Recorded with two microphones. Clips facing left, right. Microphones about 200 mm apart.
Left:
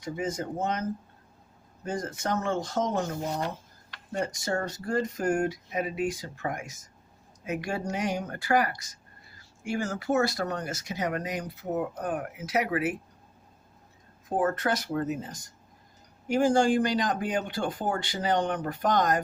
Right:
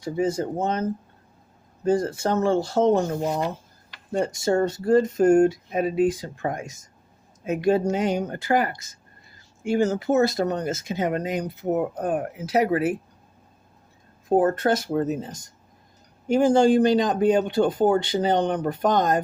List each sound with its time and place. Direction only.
0.0 s speech: 30° right (ahead or behind)
4.1 s speech: 30° right (ahead or behind)
14.3 s speech: 30° right (ahead or behind)